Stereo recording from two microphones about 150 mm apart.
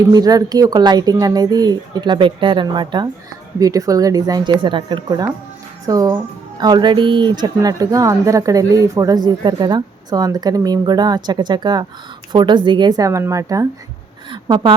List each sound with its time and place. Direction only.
0.1 s a woman's voice: 25° right (ahead or behind)